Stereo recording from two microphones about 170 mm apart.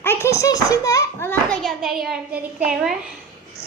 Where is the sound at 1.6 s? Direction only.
Centre (ahead or behind).